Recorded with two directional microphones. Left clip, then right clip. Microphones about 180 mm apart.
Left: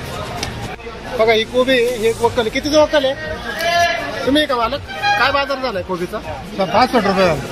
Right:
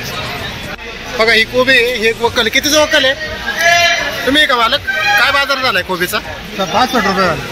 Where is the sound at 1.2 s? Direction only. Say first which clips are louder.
Right 3 dB; centre (ahead or behind).